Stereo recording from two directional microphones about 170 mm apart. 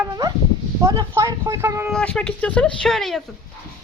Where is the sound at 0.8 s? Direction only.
15° right (ahead or behind).